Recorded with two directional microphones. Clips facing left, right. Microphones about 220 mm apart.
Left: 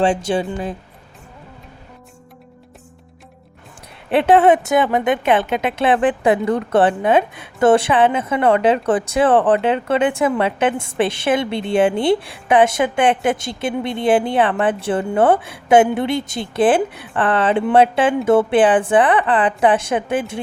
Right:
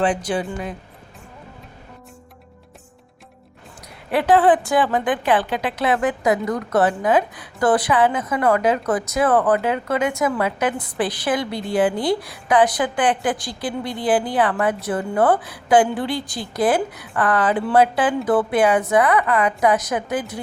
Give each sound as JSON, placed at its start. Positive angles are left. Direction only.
{"t": 0.0, "sound": "a woman's voice", "side_deg": 25}
{"t": 4.1, "sound": "a woman's voice", "side_deg": 25}